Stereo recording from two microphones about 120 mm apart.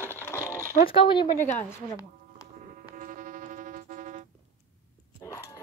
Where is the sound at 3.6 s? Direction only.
90° right.